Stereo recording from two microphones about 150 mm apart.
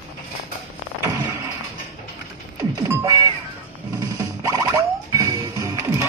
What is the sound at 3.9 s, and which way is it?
Music, 25° right (ahead or behind).